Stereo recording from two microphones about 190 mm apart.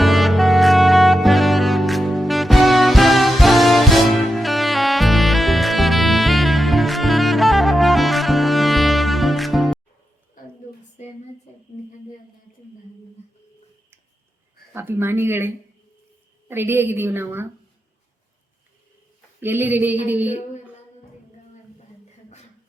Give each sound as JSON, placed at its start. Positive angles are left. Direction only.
{"t": 0.0, "sound": "music", "side_deg": 0}
{"t": 10.4, "sound": "a sound", "side_deg": 45}
{"t": 14.7, "sound": "a woman's voice", "side_deg": -10}
{"t": 19.4, "sound": "a woman's voice", "side_deg": -10}